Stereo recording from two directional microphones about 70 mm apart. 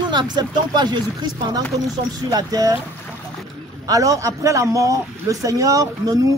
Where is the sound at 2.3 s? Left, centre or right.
Right.